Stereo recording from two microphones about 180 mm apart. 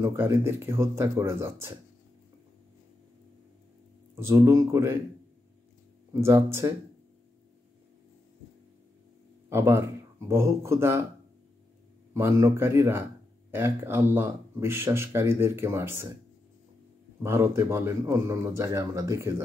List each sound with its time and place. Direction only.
0.0 s speech: 15° right (ahead or behind)
4.1 s speech: 15° right (ahead or behind)
6.2 s speech: 15° right (ahead or behind)
9.5 s speech: 15° right (ahead or behind)
12.1 s speech: 15° right (ahead or behind)
17.2 s speech: 15° right (ahead or behind)